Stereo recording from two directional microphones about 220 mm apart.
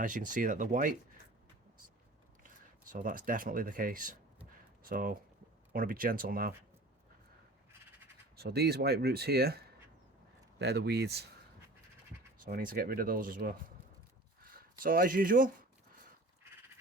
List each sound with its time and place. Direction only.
0.0 s speech: 35° right (ahead or behind)
2.9 s speech: 40° right (ahead or behind)
8.4 s speech: 45° right (ahead or behind)
12.4 s speech: 40° right (ahead or behind)